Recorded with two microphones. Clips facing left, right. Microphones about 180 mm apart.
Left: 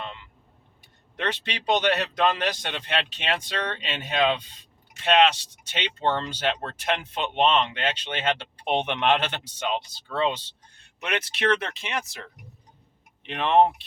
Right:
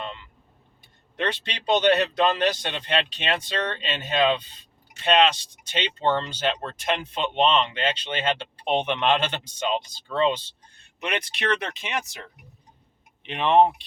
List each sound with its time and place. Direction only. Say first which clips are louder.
1.1 s speech: right 1 dB; 10° left (ahead or behind)
13.2 s speech: right 1 dB; centre (ahead or behind)